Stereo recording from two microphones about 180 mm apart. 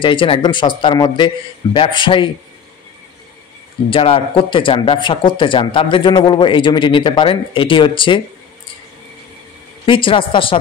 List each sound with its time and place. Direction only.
0.0 s speech: 30° left (ahead or behind)
3.9 s speech: 30° left (ahead or behind)
9.8 s speech: 30° left (ahead or behind)